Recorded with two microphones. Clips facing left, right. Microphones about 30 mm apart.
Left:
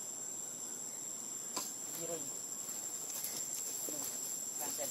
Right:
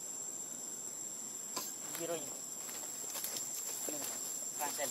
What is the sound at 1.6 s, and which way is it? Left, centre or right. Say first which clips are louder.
Cricket: even; centre.